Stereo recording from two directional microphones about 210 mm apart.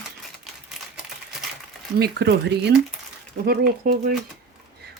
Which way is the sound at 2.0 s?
50° right (ahead or behind).